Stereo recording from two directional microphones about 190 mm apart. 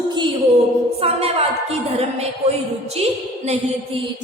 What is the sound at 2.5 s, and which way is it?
Music, 35° right (ahead or behind).